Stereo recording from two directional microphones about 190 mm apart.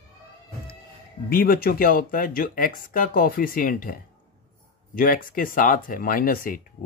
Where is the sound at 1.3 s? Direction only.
50° left (ahead or behind).